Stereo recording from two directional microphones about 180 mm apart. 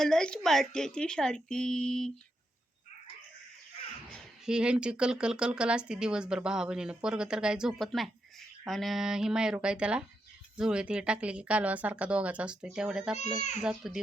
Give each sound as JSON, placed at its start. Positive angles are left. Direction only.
{"t": 0.0, "sound": "speech", "side_deg": 5}
{"t": 4.1, "sound": "a woman's voice", "side_deg": -5}
{"t": 13.1, "sound": "a child's voice", "side_deg": 40}
{"t": 13.6, "sound": "speech", "side_deg": -5}